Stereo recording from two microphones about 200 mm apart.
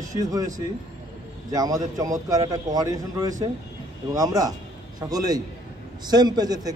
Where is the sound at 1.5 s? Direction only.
20° right (ahead or behind).